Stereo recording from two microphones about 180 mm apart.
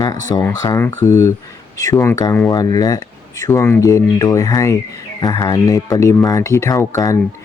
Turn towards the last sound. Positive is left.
turn(degrees=15)  # may be behind; listen again after turning